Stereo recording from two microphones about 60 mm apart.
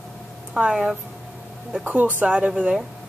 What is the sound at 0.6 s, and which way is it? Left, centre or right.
Speech, centre.